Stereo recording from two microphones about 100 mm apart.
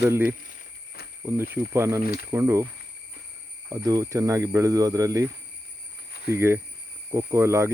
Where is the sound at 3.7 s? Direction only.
35° right (ahead or behind).